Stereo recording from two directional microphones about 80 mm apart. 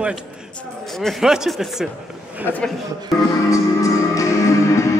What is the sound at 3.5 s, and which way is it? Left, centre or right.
Music, left.